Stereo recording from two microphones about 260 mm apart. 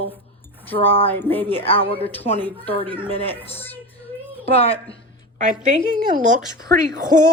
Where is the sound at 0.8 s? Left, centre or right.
Left.